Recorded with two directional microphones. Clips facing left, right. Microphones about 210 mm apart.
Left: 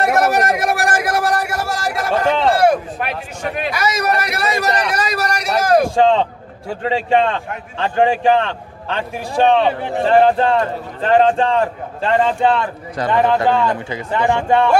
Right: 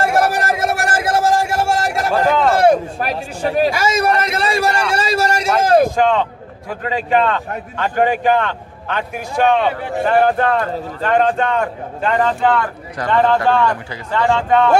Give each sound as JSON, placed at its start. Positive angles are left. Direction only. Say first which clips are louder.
{"t": 0.1, "sound": "a sound", "louder": "left 1 dB", "side_deg": -30}
{"t": 2.2, "sound": "a man's voice", "louder": "even", "side_deg": 25}
{"t": 2.6, "sound": "a man's voice", "louder": "right 2 dB", "side_deg": -35}
{"t": 5.9, "sound": "a man's voice", "louder": "left 2 dB", "side_deg": 30}